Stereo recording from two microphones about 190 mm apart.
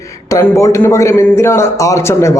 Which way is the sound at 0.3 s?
15° left (ahead or behind).